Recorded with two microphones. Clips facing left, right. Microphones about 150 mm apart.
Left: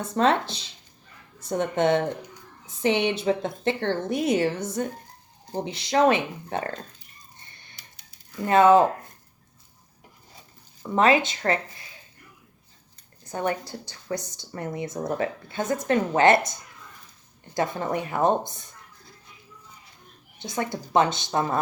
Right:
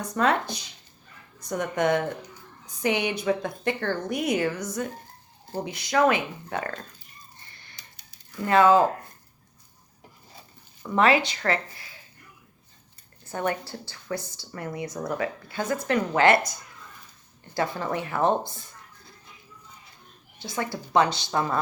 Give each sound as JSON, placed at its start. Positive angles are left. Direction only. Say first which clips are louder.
{"t": 0.0, "sound": "a woman's voice", "louder": "left 2 dB", "side_deg": 25}
{"t": 7.3, "sound": "a sound", "louder": "even", "side_deg": 20}
{"t": 8.4, "sound": "a woman's voice", "louder": "left 2 dB", "side_deg": 20}
{"t": 10.8, "sound": "a woman's voice", "louder": "left 1 dB", "side_deg": 20}
{"t": 13.2, "sound": "a woman's voice", "louder": "left 1 dB", "side_deg": 20}
{"t": 20.4, "sound": "a woman's voice", "louder": "left 2 dB", "side_deg": 20}